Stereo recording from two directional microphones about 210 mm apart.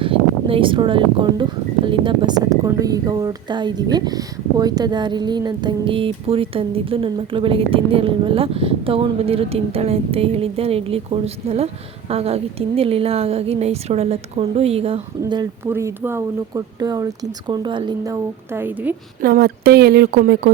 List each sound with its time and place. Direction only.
0.0 s a woman's voice: 25° right (ahead or behind)
15.2 s speech: 15° right (ahead or behind)
19.2 s speech: 45° right (ahead or behind)